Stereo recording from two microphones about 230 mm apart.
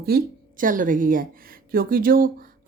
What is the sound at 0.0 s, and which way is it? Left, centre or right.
A woman's voice, right.